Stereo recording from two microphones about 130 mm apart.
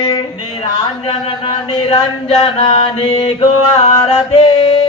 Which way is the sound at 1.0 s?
40° left (ahead or behind).